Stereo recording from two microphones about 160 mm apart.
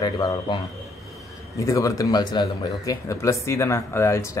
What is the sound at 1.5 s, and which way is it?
Speech, 20° left (ahead or behind).